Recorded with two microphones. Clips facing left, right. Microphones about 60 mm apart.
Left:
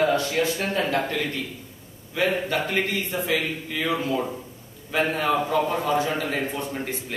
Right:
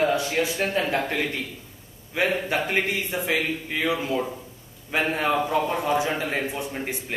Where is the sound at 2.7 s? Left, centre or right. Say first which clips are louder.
Even; centre.